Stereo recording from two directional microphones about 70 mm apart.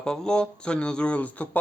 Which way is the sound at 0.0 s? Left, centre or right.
Centre.